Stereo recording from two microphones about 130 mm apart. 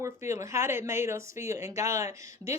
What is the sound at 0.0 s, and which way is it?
Speech, 20° right (ahead or behind).